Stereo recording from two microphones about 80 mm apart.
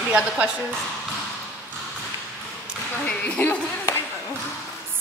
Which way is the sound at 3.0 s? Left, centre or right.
Centre.